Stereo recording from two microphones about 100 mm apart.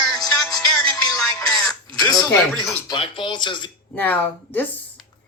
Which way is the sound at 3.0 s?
55° left (ahead or behind).